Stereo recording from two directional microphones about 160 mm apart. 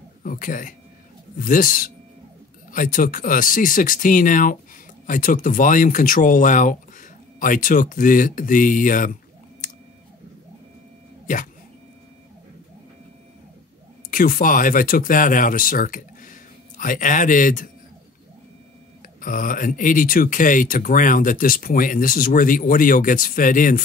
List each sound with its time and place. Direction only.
0.2 s speech: 55° left (ahead or behind)
14.1 s speech: 60° left (ahead or behind)
19.2 s speech: 60° left (ahead or behind)